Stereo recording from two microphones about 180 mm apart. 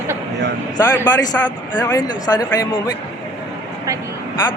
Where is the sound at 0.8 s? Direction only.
20° left (ahead or behind).